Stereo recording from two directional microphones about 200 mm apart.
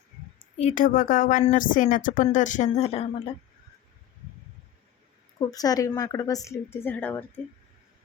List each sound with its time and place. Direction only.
0.6 s speech: 40° left (ahead or behind)
5.4 s speech: 20° left (ahead or behind)